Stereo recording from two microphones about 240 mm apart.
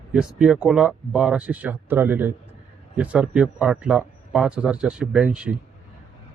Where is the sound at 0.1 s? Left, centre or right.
Centre.